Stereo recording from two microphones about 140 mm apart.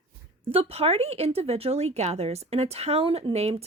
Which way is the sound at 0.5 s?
45° right (ahead or behind).